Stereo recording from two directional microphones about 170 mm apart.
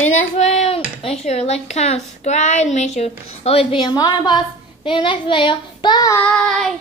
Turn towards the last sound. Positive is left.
turn(degrees=5)  # may be behind; listen again after turning